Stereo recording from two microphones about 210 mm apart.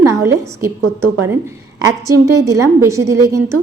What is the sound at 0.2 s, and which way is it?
A woman's voice, 15° right (ahead or behind).